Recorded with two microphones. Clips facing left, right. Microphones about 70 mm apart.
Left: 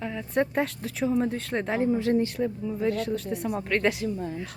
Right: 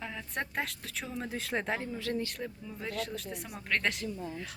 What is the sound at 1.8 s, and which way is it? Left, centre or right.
Speech, left.